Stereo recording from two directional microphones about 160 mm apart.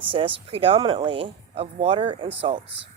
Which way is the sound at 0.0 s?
30° right (ahead or behind).